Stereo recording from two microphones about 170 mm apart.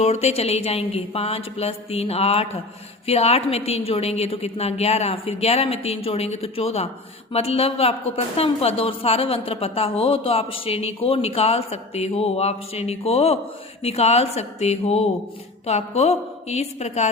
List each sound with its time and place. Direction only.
0.0 s a woman's voice: 40° left (ahead or behind)